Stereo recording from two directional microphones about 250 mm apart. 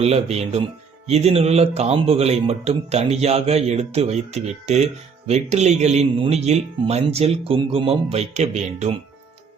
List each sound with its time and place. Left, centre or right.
0.0 s a man's voice: right